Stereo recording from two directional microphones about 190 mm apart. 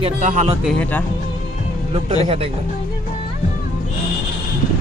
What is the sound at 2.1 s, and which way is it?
Speech, 30° right (ahead or behind).